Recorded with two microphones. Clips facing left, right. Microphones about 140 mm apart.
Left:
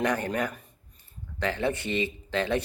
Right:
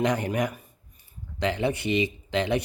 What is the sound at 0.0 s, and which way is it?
A man's voice, 15° right (ahead or behind).